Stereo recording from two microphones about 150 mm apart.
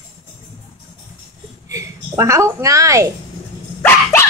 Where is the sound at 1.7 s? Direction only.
20° right (ahead or behind).